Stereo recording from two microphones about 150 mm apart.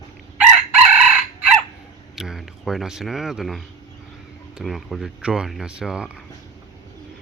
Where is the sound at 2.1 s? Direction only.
Centre (ahead or behind).